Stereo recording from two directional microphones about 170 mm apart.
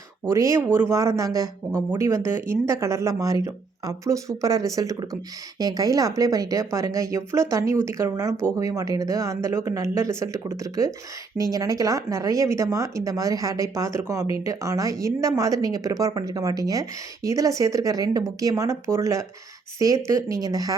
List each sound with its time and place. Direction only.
0.3 s speech: 20° right (ahead or behind)